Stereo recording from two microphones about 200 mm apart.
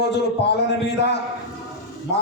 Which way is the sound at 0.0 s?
55° left (ahead or behind).